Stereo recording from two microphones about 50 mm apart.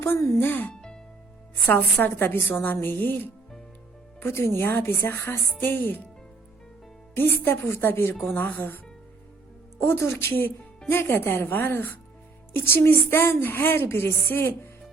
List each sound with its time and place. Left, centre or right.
0.3 s a woman's voice: left
0.7 s music: centre
1.6 s a woman's voice: left
4.2 s a woman's voice: left
7.2 s a woman's voice: left
8.2 s a woman's voice: left
9.8 s a woman's voice: left
14.3 s a woman's voice: left